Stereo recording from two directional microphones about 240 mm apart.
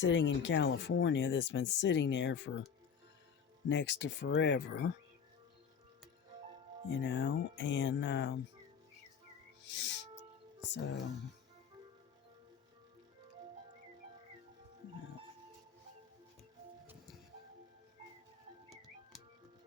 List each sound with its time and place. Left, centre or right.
0.0 s speech: left
3.7 s speech: left
6.8 s speech: left
9.6 s music: left
10.7 s speech: left